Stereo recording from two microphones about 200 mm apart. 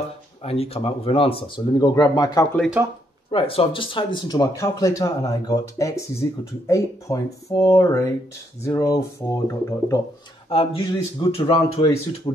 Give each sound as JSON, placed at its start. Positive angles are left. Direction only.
{"t": 0.4, "sound": "speech", "side_deg": 30}
{"t": 2.8, "sound": "speech", "side_deg": -10}
{"t": 3.3, "sound": "speech", "side_deg": 25}
{"t": 10.5, "sound": "speech", "side_deg": 25}